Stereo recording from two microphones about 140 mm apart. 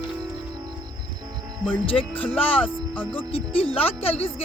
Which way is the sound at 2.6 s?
15° left (ahead or behind).